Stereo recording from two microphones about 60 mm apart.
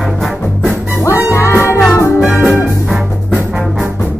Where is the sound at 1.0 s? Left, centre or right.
Left.